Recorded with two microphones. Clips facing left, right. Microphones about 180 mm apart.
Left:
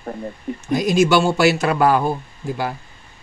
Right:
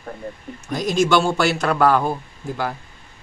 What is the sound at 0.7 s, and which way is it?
A man's voice, 10° left (ahead or behind).